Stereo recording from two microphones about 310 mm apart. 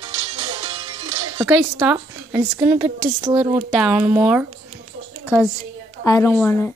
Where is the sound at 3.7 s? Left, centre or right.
Centre.